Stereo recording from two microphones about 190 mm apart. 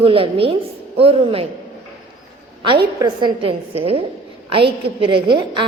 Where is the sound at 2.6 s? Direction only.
25° right (ahead or behind).